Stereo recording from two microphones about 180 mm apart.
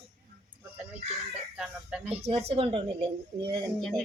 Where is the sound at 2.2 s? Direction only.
35° right (ahead or behind).